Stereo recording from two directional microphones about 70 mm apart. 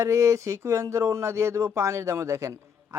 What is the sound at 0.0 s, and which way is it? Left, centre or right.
Speech, right.